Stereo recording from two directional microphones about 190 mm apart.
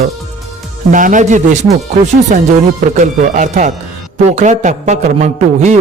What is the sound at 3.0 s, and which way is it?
Speech, 40° right (ahead or behind).